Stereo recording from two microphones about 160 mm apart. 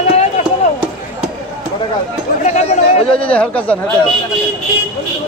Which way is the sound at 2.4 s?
45° left (ahead or behind).